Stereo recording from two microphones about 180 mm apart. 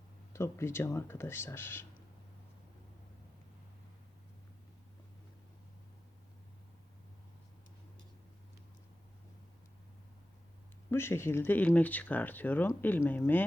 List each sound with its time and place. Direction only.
0.3 s speech: 15° left (ahead or behind)
10.9 s speech: 15° left (ahead or behind)